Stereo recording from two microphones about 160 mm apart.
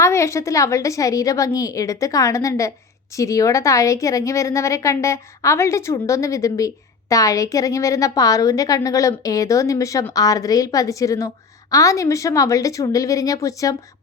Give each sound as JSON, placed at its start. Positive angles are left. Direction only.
{"t": 0.0, "sound": "a woman's voice", "side_deg": 20}